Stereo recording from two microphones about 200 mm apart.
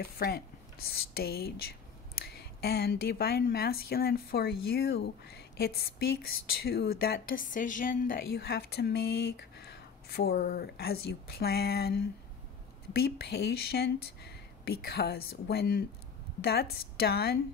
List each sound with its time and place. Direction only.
0.0 s a woman's voice: 50° left (ahead or behind)